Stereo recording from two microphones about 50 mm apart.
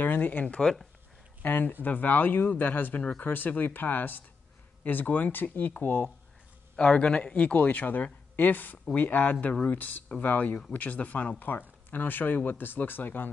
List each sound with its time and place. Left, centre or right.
0.0 s speech: left
3.0 s a man's voice: left
3.3 s speech: left
6.8 s a man's voice: left